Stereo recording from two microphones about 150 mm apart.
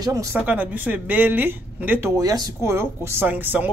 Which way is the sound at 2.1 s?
25° right (ahead or behind).